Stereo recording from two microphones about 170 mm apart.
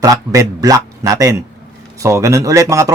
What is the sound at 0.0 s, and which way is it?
A man's voice, 20° right (ahead or behind).